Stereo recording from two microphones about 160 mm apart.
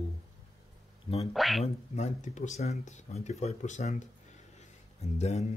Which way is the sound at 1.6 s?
45° left (ahead or behind).